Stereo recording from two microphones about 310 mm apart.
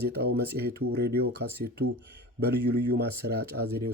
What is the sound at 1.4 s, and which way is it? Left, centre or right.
Speech, right.